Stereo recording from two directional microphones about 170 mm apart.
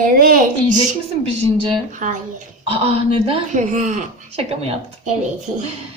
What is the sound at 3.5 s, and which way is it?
A woman's voice, 45° right (ahead or behind).